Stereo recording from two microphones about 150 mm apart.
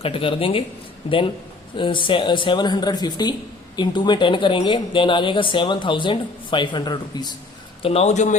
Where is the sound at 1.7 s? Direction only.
35° left (ahead or behind).